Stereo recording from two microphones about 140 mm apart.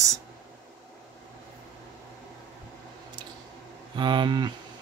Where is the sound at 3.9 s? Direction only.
35° right (ahead or behind).